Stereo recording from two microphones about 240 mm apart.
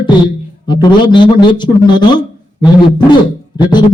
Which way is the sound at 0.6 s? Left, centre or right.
Centre.